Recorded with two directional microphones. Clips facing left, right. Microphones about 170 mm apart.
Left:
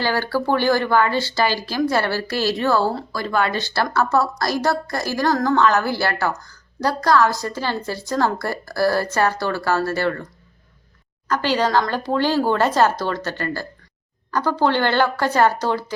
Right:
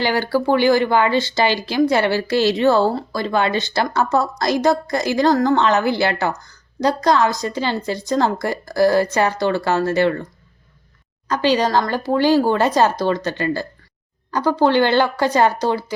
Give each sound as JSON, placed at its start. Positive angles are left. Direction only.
{"t": 0.0, "sound": "speech", "side_deg": -15}
{"t": 11.3, "sound": "speech", "side_deg": -15}